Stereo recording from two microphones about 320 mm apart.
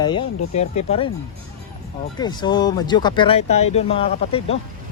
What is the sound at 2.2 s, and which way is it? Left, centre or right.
Speech, centre.